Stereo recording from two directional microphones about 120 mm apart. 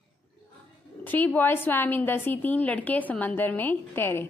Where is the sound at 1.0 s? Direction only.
15° left (ahead or behind).